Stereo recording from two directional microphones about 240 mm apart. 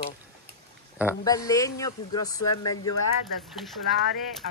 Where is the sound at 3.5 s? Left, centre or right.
Centre.